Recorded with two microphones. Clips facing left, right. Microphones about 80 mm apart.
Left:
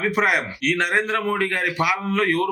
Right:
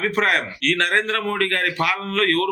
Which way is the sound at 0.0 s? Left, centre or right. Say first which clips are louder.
Even; centre.